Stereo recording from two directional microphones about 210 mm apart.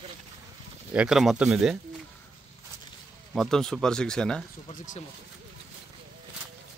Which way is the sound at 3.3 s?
Centre (ahead or behind).